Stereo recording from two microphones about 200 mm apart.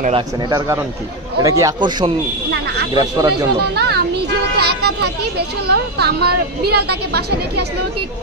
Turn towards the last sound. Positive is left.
turn(degrees=-55)  # may be behind; listen again after turning